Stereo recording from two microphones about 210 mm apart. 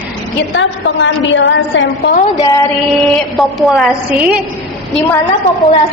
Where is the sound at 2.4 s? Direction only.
15° left (ahead or behind).